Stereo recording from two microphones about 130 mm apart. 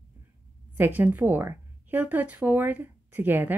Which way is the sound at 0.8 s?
15° right (ahead or behind).